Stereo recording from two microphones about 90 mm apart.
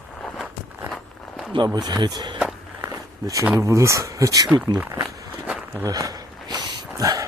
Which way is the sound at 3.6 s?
35° right (ahead or behind).